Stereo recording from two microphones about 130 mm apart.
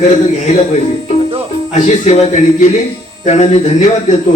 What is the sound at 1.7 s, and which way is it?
Speech, 65° left (ahead or behind).